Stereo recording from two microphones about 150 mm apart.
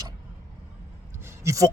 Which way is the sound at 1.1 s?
20° right (ahead or behind).